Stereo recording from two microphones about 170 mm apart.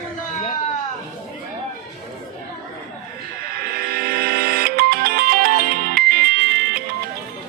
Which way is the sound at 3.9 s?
65° right (ahead or behind).